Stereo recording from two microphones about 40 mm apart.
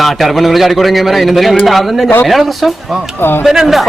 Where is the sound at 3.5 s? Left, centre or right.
Centre.